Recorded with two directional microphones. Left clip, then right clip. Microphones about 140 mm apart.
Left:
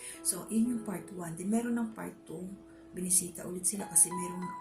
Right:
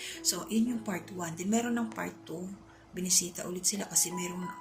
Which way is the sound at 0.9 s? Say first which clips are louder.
Right 4 dB; 20° left (ahead or behind).